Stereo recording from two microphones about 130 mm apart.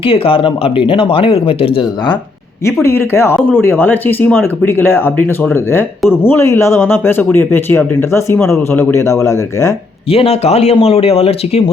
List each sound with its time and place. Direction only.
0.0 s speech: 45° left (ahead or behind)
2.8 s speech: 20° left (ahead or behind)
10.1 s speech: 50° left (ahead or behind)